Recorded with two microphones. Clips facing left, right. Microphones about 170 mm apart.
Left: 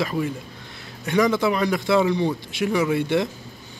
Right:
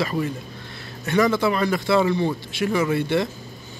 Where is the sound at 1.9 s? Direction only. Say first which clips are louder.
Even; 15° left (ahead or behind).